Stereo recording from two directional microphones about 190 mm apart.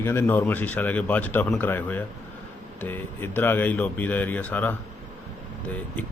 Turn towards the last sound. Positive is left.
turn(degrees=10)  # may be behind; listen again after turning